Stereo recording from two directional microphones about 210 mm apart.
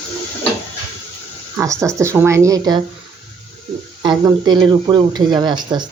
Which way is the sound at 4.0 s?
20° right (ahead or behind).